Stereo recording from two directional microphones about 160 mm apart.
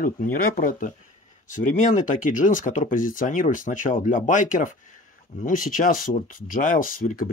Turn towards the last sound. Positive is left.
turn(degrees=60)  # may be behind; listen again after turning